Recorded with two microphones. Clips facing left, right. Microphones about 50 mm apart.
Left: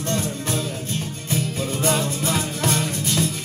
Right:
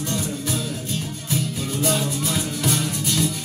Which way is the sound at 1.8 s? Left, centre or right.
Left.